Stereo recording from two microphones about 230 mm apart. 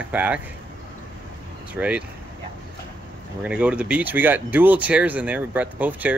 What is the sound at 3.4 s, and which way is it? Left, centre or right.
Speech, centre.